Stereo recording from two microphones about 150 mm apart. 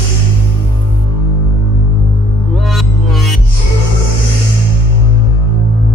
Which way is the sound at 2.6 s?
Centre (ahead or behind).